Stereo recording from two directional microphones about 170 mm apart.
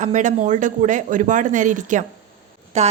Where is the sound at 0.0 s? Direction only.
45° right (ahead or behind).